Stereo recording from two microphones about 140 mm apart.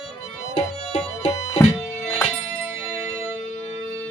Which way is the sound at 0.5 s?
45° left (ahead or behind).